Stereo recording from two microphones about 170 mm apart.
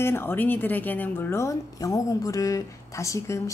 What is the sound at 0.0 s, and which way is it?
Speech, 15° left (ahead or behind).